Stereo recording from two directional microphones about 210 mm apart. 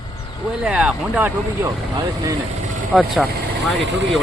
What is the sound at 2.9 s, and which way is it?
Speech, centre (ahead or behind).